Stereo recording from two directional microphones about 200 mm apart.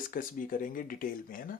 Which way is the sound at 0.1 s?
40° left (ahead or behind).